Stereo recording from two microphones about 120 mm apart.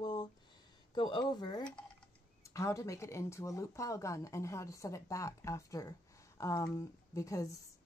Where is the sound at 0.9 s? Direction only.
40° left (ahead or behind).